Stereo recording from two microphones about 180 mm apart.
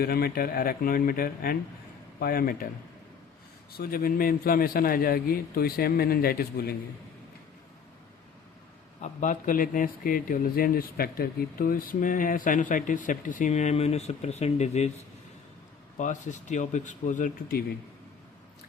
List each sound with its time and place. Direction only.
0.0 s a man's voice: 60° left (ahead or behind)
3.7 s a man's voice: 55° left (ahead or behind)
9.0 s speech: 45° left (ahead or behind)
16.0 s speech: 40° left (ahead or behind)